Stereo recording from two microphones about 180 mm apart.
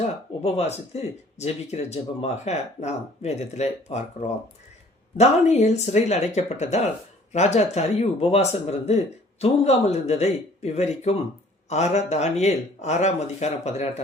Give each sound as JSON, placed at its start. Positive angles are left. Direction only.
{"t": 0.4, "sound": "speech", "side_deg": 35}
{"t": 5.1, "sound": "speech", "side_deg": 40}